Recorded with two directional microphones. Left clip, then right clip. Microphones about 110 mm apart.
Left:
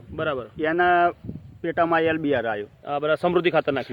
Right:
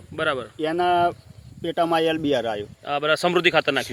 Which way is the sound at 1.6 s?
20° right (ahead or behind).